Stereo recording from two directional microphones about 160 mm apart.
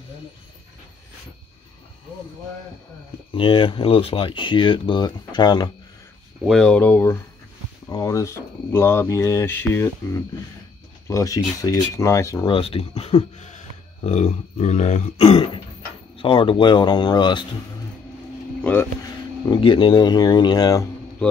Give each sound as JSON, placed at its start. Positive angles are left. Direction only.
{"t": 3.3, "sound": "speech", "side_deg": 35}
{"t": 6.4, "sound": "speech", "side_deg": 0}
{"t": 11.1, "sound": "speech", "side_deg": 20}
{"t": 12.4, "sound": "speech", "side_deg": 35}
{"t": 18.6, "sound": "speech", "side_deg": 15}
{"t": 19.0, "sound": "speech", "side_deg": 30}
{"t": 21.2, "sound": "a man's voice", "side_deg": 5}